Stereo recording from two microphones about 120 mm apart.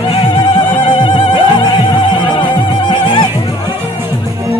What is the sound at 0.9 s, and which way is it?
Music, 40° left (ahead or behind).